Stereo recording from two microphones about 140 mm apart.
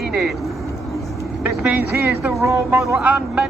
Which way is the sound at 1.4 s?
10° right (ahead or behind).